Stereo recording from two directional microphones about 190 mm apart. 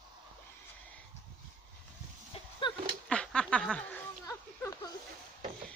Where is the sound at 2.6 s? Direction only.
25° left (ahead or behind).